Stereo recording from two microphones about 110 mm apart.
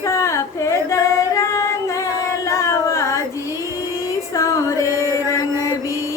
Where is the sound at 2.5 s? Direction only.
30° left (ahead or behind).